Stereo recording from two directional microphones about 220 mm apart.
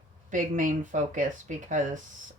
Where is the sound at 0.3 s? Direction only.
35° right (ahead or behind).